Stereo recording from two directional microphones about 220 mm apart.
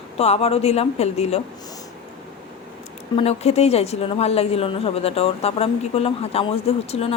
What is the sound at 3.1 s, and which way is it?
A woman's voice, 30° left (ahead or behind).